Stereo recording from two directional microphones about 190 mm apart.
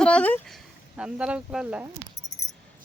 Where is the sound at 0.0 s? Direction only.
5° left (ahead or behind).